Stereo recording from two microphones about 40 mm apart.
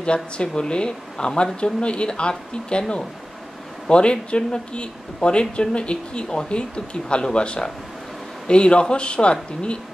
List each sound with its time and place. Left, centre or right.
0.0 s speech: left
3.9 s speech: left